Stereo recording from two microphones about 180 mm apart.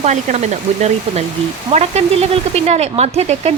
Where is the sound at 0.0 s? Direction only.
40° right (ahead or behind).